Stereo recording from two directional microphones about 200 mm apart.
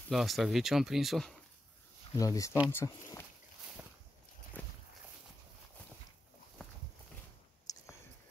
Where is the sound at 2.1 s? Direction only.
15° left (ahead or behind).